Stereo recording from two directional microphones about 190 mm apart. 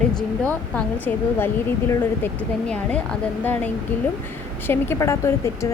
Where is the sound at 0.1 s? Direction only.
5° left (ahead or behind).